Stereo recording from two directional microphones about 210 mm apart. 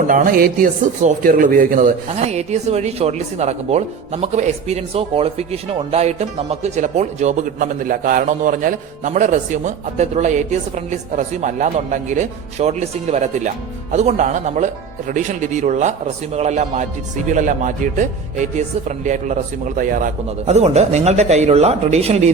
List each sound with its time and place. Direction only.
0.1 s a man's voice: 40° right (ahead or behind)